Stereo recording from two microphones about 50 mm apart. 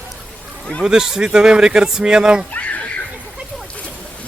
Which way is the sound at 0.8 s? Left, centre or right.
Centre.